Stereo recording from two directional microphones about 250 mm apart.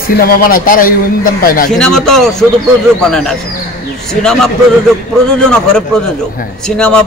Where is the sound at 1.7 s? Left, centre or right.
Centre.